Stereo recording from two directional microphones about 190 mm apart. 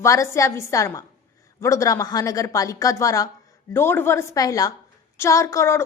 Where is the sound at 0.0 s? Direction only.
15° left (ahead or behind).